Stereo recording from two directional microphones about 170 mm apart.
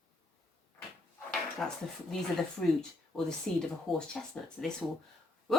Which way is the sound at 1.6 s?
Centre (ahead or behind).